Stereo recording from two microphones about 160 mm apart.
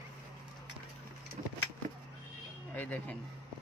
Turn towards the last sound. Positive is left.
turn(degrees=10)  # may be behind; listen again after turning